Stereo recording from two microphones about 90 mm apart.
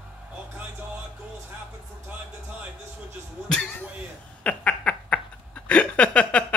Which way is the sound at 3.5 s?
10° left (ahead or behind).